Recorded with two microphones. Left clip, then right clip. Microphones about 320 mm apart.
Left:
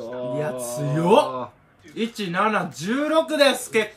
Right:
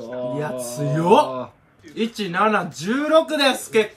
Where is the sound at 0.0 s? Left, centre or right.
Centre.